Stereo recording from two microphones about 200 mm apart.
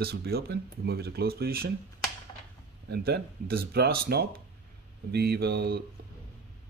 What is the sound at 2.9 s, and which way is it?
Speech, 50° right (ahead or behind).